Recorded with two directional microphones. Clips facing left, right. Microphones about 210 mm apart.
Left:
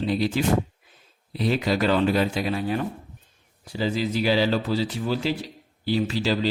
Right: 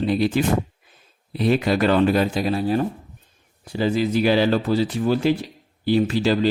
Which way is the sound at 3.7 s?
55° right (ahead or behind).